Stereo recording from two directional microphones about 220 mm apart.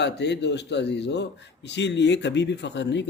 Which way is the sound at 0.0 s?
50° left (ahead or behind).